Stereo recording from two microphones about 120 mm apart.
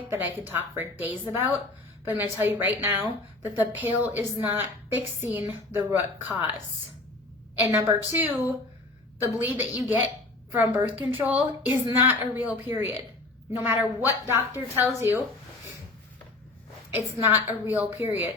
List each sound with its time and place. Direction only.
0.3 s a woman's voice: 15° right (ahead or behind)
7.6 s a woman's voice: 20° right (ahead or behind)
16.9 s a woman's voice: 20° right (ahead or behind)